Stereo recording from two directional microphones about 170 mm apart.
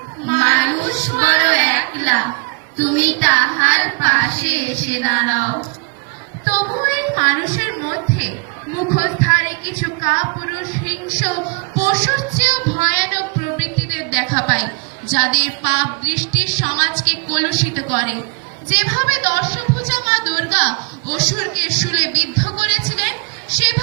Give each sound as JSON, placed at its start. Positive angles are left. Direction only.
{"t": 0.3, "sound": "child singing", "side_deg": 45}
{"t": 7.2, "sound": "child singing", "side_deg": 50}
{"t": 9.0, "sound": "music", "side_deg": 50}
{"t": 10.8, "sound": "child singing", "side_deg": 50}
{"t": 18.7, "sound": "a woman's voice", "side_deg": 45}